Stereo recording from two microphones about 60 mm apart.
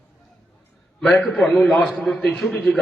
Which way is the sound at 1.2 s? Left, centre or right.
Centre.